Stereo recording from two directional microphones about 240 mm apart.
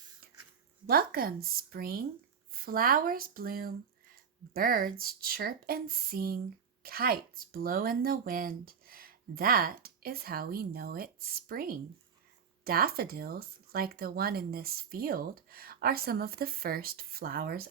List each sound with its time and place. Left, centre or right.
0.9 s speech: right